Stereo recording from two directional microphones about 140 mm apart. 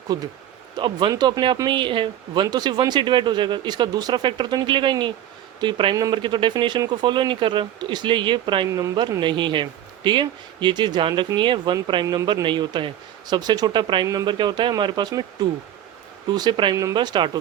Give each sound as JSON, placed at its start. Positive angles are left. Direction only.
{"t": 0.1, "sound": "speech", "side_deg": -30}
{"t": 16.3, "sound": "speech", "side_deg": -30}